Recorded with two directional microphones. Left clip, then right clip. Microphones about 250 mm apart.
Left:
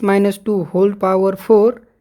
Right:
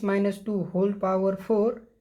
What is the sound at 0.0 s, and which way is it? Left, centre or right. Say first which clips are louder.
Speech: left 11 dB; left.